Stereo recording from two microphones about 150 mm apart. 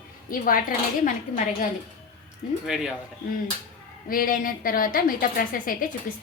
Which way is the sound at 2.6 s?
5° right (ahead or behind).